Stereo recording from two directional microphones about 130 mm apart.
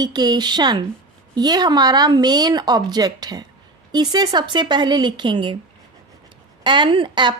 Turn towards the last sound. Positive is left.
turn(degrees=-40)  # may be behind; listen again after turning